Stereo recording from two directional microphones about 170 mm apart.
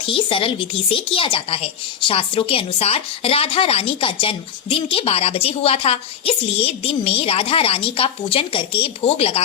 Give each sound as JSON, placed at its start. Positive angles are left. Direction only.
{"t": 0.0, "sound": "speech", "side_deg": 30}